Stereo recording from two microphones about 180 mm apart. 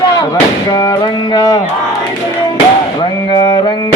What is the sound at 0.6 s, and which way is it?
Speech, 20° left (ahead or behind).